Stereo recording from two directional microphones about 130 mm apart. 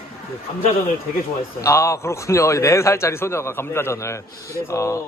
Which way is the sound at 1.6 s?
25° left (ahead or behind).